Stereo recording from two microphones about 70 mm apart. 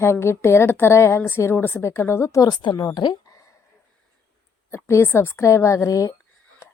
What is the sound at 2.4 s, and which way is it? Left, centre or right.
Speech, left.